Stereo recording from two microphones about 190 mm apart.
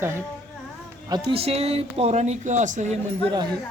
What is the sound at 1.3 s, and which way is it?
Speech, 30° right (ahead or behind).